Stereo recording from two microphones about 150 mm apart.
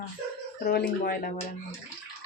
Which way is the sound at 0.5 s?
90° left.